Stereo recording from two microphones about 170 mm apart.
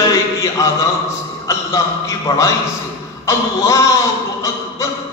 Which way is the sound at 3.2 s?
20° left (ahead or behind).